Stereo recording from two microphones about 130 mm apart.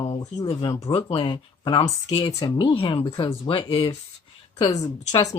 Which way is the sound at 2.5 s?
40° left (ahead or behind).